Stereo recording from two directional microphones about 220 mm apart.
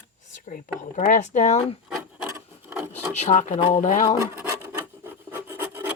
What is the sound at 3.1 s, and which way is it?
Speech, 30° left (ahead or behind).